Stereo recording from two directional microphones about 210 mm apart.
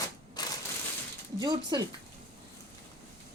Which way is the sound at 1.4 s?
20° right (ahead or behind).